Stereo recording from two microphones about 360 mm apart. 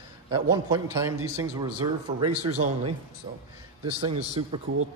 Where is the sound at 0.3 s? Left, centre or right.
Centre.